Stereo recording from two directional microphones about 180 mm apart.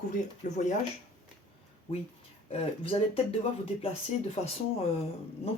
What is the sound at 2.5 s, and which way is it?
Speech, 30° left (ahead or behind).